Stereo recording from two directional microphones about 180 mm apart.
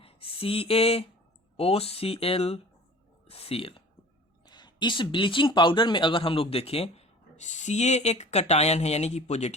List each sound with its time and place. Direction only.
0.0 s speech: 30° left (ahead or behind)